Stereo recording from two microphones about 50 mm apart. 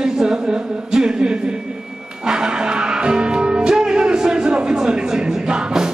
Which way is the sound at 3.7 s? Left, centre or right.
Centre.